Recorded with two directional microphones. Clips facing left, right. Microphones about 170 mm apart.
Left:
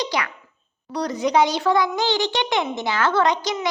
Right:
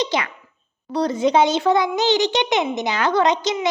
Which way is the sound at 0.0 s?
25° right (ahead or behind).